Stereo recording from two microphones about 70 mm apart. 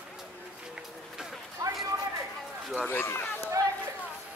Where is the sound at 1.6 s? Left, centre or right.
Right.